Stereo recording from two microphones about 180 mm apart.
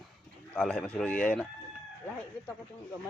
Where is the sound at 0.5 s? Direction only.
5° left (ahead or behind).